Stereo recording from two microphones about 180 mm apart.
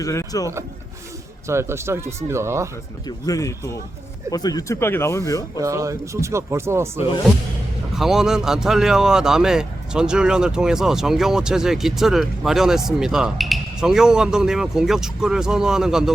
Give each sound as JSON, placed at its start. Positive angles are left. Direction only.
{"t": 0.0, "sound": "speech", "side_deg": 20}
{"t": 1.5, "sound": "speech", "side_deg": -15}
{"t": 3.1, "sound": "speech", "side_deg": 20}
{"t": 5.5, "sound": "speech", "side_deg": -15}
{"t": 7.9, "sound": "speech", "side_deg": 0}